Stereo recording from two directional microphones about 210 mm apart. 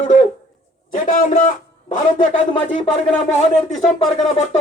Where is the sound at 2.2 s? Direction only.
25° left (ahead or behind).